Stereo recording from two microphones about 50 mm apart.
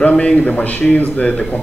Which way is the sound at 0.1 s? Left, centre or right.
Centre.